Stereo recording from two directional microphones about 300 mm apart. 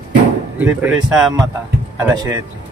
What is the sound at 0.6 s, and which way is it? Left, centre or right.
Speech, centre.